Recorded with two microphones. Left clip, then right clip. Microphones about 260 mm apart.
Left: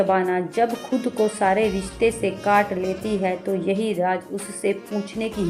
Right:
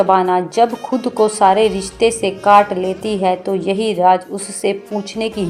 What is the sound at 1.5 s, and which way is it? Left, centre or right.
Speech, centre.